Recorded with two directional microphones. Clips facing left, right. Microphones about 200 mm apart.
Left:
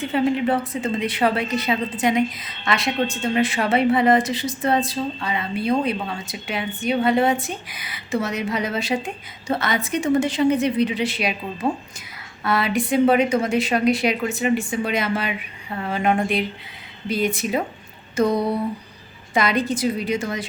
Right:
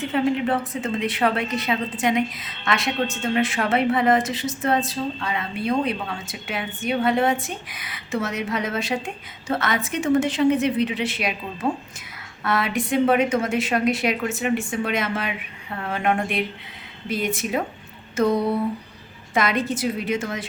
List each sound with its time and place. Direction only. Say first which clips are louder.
0.0 s a woman's voice: left 1 dB; centre (ahead or behind)
18.2 s a sound: even; 15° left (ahead or behind)
19.3 s a woman's voice: left 2 dB; centre (ahead or behind)